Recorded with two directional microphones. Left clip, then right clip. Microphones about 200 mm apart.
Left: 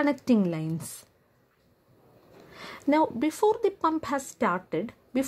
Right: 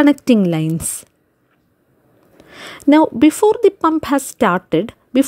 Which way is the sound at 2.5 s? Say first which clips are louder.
Right 13 dB; 35° right (ahead or behind).